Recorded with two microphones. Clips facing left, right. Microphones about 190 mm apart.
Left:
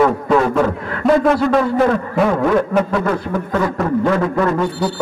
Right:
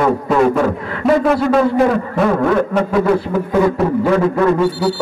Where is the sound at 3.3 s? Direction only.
5° right (ahead or behind).